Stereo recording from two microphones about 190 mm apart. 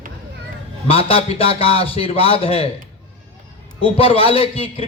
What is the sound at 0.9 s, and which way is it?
A man's voice, 30° left (ahead or behind).